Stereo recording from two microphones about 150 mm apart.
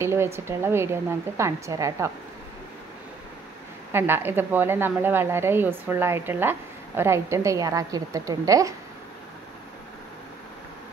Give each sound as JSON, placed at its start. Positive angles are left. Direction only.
{"t": 0.0, "sound": "a woman's voice", "side_deg": -15}
{"t": 3.9, "sound": "a woman's voice", "side_deg": -15}